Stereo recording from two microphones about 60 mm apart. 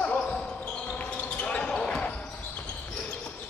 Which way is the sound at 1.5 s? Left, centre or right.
Centre.